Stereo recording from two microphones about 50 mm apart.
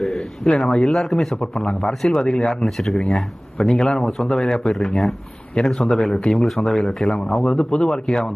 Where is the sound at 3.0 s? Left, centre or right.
Centre.